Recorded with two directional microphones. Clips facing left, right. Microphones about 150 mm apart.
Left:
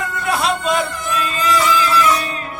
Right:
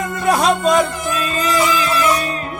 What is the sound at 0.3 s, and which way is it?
Music, 40° right (ahead or behind).